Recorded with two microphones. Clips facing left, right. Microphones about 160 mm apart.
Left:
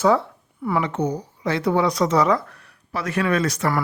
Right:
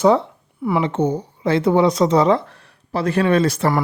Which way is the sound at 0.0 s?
20° right (ahead or behind).